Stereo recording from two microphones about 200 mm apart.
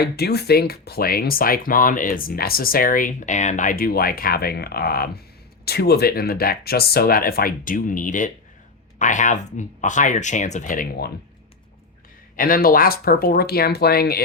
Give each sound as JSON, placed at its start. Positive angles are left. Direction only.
{"t": 0.0, "sound": "speech", "side_deg": 55}
{"t": 12.4, "sound": "speech", "side_deg": 45}